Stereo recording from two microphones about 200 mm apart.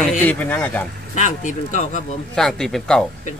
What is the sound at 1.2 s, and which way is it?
Speech, 40° left (ahead or behind).